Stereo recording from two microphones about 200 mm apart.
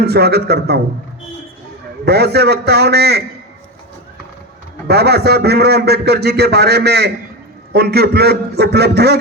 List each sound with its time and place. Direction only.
0.0 s a man's voice: 55° right (ahead or behind)
2.0 s a man's voice: 55° right (ahead or behind)
4.9 s a man's voice: 55° right (ahead or behind)